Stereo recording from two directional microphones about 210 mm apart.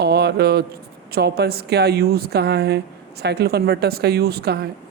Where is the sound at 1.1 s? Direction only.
50° right (ahead or behind).